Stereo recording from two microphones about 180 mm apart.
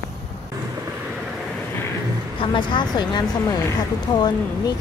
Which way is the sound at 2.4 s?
25° left (ahead or behind).